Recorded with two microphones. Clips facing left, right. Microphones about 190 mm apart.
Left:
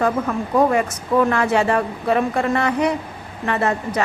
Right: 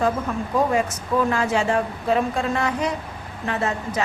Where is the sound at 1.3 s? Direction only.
60° left (ahead or behind).